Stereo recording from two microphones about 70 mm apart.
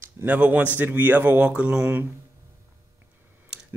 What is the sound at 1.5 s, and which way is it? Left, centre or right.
Speech, centre.